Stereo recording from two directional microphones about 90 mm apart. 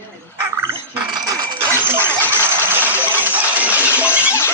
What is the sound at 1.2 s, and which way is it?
Coin, 45° right (ahead or behind).